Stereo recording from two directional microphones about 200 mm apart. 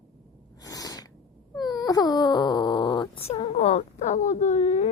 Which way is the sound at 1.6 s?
20° left (ahead or behind).